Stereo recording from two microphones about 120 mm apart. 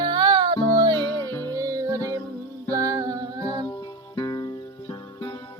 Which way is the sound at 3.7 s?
35° left (ahead or behind).